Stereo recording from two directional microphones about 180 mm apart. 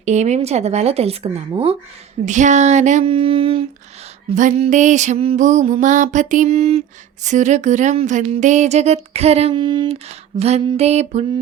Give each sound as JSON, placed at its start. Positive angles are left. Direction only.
{"t": 0.0, "sound": "music", "side_deg": -40}